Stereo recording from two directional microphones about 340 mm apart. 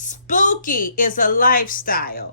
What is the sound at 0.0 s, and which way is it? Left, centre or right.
A woman's voice, left.